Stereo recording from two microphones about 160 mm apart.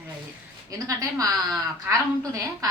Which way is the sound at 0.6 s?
20° right (ahead or behind).